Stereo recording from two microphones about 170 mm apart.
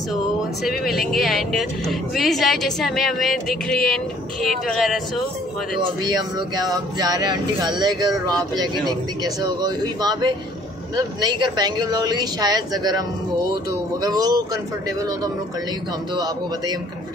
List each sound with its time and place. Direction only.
0.7 s speech: centre (ahead or behind)
6.0 s speech: 25° right (ahead or behind)
14.0 s speech: 25° right (ahead or behind)